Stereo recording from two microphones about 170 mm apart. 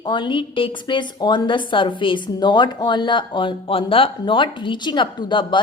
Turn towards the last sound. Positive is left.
turn(degrees=30)  # may be behind; listen again after turning